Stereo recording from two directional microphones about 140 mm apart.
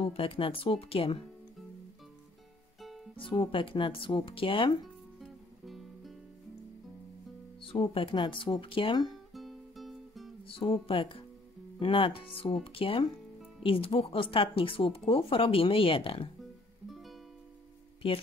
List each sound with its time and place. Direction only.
0.0 s speech: 45° left (ahead or behind)
2.8 s music: centre (ahead or behind)
3.3 s speech: 40° left (ahead or behind)
5.2 s music: centre (ahead or behind)
7.6 s speech: 40° left (ahead or behind)
9.3 s music: centre (ahead or behind)
10.4 s speech: 40° left (ahead or behind)
16.9 s music: centre (ahead or behind)
18.0 s speech: 40° left (ahead or behind)